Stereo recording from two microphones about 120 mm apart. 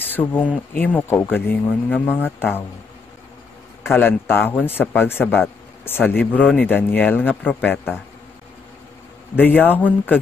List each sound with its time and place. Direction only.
0.1 s a man's voice: 15° left (ahead or behind)
3.8 s a man's voice: 20° left (ahead or behind)
9.3 s a man's voice: 15° left (ahead or behind)